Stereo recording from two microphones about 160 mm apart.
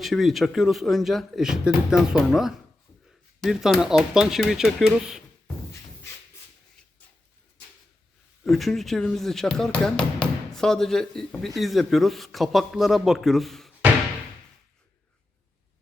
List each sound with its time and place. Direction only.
0.0 s speech: centre (ahead or behind)
8.4 s speech: centre (ahead or behind)